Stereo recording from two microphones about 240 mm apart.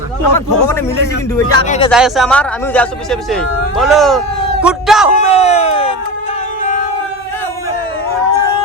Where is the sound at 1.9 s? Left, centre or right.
Centre.